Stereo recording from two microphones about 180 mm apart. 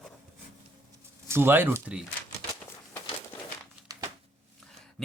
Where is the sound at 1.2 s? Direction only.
15° right (ahead or behind).